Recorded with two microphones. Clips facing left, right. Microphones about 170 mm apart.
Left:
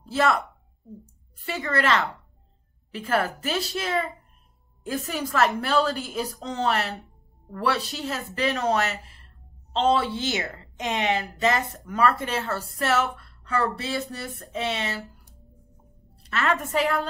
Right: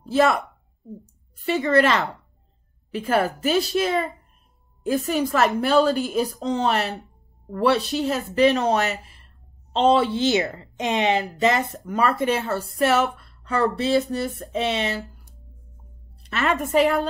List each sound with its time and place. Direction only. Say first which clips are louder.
0.1 s a woman's voice: right 4 dB; 20° right (ahead or behind)
16.2 s a woman's voice: right 2 dB; 20° right (ahead or behind)